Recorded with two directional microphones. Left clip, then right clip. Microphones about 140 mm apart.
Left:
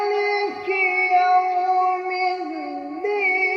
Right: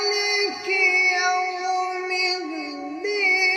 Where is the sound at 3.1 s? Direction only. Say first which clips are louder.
Even; 15° right (ahead or behind).